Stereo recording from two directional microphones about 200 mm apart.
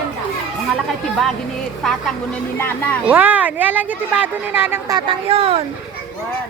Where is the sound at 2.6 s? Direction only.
10° left (ahead or behind).